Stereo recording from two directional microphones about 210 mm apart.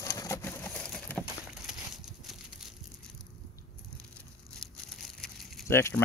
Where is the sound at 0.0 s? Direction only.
15° left (ahead or behind).